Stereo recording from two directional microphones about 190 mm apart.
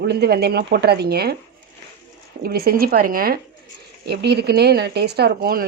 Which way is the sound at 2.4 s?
55° right (ahead or behind).